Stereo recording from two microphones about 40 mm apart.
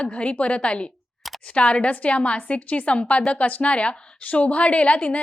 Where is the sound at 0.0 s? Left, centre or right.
Left.